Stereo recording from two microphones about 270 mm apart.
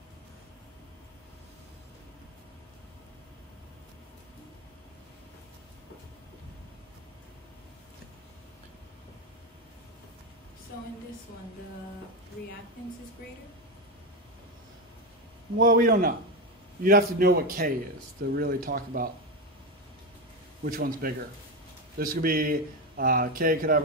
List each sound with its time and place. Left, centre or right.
15.6 s speech: right
20.6 s speech: right